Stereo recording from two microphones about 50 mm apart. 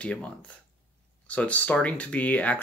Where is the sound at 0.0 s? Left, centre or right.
Left.